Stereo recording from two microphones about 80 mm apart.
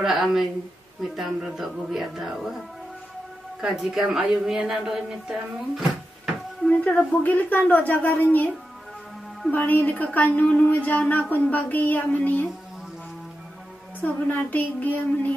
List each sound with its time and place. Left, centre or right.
0.0 s speech: centre
3.6 s a woman's voice: centre
6.7 s a woman's voice: centre
9.5 s a woman's voice: left
14.0 s a woman's voice: centre